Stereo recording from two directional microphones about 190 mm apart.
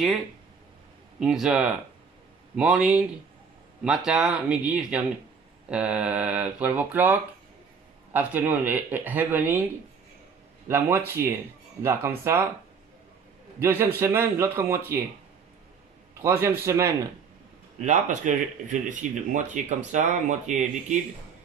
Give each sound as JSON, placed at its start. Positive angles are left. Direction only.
{"t": 1.2, "sound": "speech", "side_deg": -5}
{"t": 10.7, "sound": "speech", "side_deg": -10}
{"t": 13.6, "sound": "speech", "side_deg": -10}
{"t": 16.2, "sound": "speech", "side_deg": -15}
{"t": 17.7, "sound": "speech", "side_deg": -40}